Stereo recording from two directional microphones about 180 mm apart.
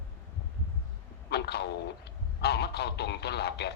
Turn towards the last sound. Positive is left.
turn(degrees=65)  # may be behind; listen again after turning